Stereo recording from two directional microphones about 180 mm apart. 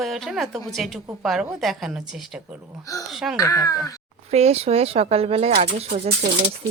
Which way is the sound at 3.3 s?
20° left (ahead or behind).